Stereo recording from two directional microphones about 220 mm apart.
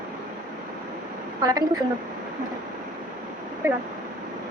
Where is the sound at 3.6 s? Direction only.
15° right (ahead or behind).